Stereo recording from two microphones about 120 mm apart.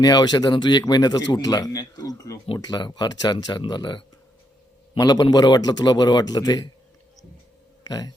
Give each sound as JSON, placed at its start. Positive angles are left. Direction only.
{"t": 0.0, "sound": "a man's voice", "side_deg": 35}
{"t": 7.9, "sound": "speech", "side_deg": 35}